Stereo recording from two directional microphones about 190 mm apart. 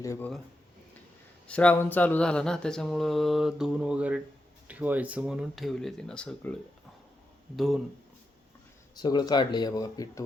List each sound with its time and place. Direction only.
0.0 s speech: 15° left (ahead or behind)
1.5 s mantra: 5° left (ahead or behind)
9.0 s speech: 20° left (ahead or behind)